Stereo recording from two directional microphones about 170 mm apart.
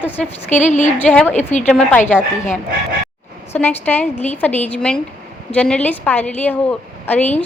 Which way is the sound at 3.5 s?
10° left (ahead or behind).